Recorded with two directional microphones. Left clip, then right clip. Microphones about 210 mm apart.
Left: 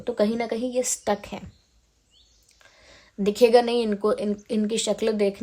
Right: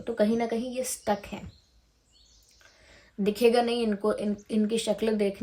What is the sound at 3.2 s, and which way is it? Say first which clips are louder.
Speech: left 5 dB; 45° left (ahead or behind).